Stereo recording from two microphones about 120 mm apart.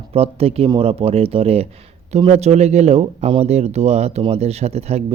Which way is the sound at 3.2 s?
55° right (ahead or behind).